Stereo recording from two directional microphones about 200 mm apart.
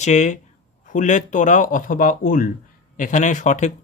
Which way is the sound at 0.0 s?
35° left (ahead or behind).